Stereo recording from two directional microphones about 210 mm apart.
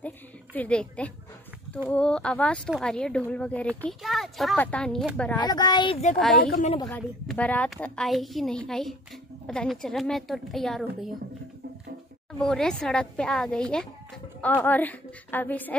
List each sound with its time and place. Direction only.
0.0 s a sound: 5° left (ahead or behind)
1.9 s speech: 5° left (ahead or behind)
5.4 s a child's voice: 20° left (ahead or behind)
7.2 s speech: 5° left (ahead or behind)
12.3 s a woman's voice: 5° left (ahead or behind)